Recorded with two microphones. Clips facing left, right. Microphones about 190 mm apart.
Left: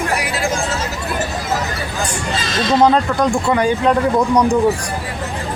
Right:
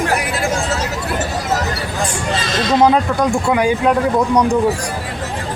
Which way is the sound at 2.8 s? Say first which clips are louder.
Even; 5° right (ahead or behind).